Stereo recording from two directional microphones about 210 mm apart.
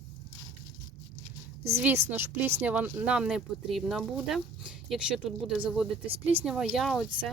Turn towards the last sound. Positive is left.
turn(degrees=0)  # may be behind; listen again after turning